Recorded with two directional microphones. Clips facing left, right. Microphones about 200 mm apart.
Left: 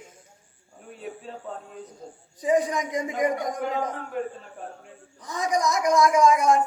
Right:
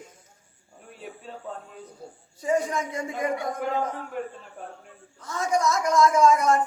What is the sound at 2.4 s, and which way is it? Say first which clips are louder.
Speech: left 2 dB; 15° left (ahead or behind).